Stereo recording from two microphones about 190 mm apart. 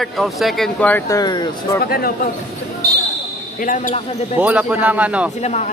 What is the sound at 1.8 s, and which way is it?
Speech, 55° left (ahead or behind).